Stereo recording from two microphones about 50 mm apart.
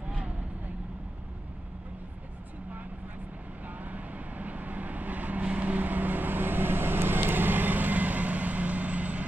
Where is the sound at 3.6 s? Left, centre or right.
Right.